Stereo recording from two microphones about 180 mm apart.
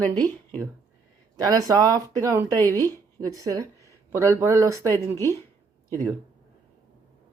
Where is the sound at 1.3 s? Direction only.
20° right (ahead or behind).